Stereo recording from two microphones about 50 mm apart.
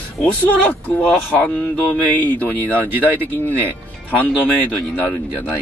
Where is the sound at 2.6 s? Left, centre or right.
Right.